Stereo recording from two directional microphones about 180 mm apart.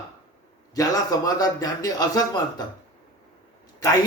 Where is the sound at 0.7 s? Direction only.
20° left (ahead or behind).